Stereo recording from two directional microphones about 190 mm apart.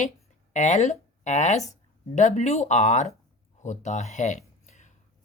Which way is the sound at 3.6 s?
40° left (ahead or behind).